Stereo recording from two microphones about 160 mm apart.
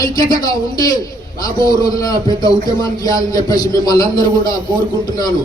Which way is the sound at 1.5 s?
20° left (ahead or behind).